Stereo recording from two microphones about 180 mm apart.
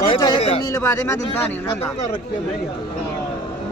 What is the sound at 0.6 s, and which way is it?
Speech, 15° left (ahead or behind).